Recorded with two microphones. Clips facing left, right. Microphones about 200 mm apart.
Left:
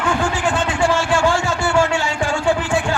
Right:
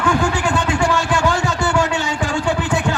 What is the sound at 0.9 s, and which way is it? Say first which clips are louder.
Music: left 1 dB; 20° right (ahead or behind).